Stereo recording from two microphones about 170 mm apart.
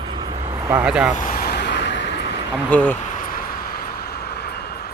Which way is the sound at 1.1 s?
50° left (ahead or behind).